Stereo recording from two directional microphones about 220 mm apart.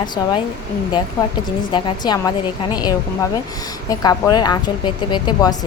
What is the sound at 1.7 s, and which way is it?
A woman's voice, 20° left (ahead or behind).